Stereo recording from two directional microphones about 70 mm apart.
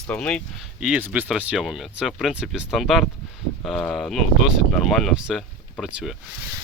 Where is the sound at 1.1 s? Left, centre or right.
Centre.